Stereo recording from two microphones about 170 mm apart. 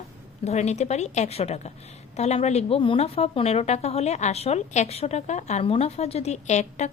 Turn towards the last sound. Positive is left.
turn(degrees=40)  # may be behind; listen again after turning